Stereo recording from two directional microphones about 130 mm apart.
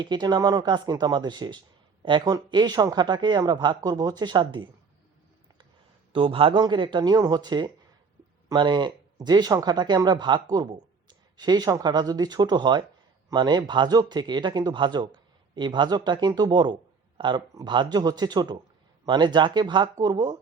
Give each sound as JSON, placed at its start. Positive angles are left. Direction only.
{"t": 0.0, "sound": "speech", "side_deg": -35}
{"t": 6.1, "sound": "speech", "side_deg": -40}